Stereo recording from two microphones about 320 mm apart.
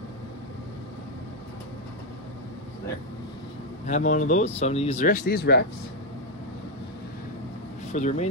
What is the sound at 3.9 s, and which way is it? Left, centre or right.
Speech, left.